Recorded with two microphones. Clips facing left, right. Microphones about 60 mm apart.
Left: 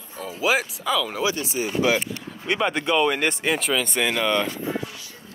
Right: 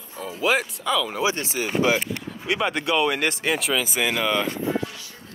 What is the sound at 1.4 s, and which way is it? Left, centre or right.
Speech, right.